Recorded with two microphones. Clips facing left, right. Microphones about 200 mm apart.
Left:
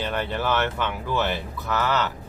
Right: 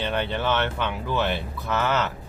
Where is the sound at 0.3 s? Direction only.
5° left (ahead or behind).